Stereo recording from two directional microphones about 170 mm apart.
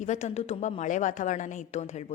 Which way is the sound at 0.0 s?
45° left (ahead or behind).